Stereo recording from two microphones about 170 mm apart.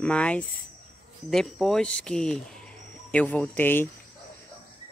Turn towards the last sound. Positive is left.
turn(degrees=10)  # may be behind; listen again after turning